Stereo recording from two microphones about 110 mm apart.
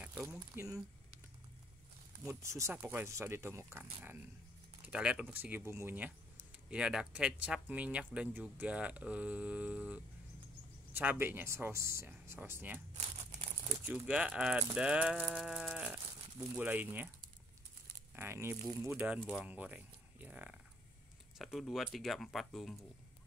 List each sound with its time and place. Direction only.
0.0 s a sound: 10° right (ahead or behind)
2.2 s speech: 25° right (ahead or behind)
4.8 s speech: 10° right (ahead or behind)
6.7 s speech: 10° right (ahead or behind)
13.8 s speech: 15° right (ahead or behind)
18.1 s speech: 20° right (ahead or behind)
21.4 s speech: centre (ahead or behind)